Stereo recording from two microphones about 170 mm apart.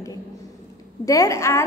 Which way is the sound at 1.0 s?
20° left (ahead or behind).